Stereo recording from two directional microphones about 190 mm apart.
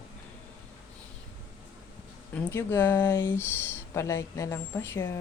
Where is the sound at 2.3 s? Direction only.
10° left (ahead or behind).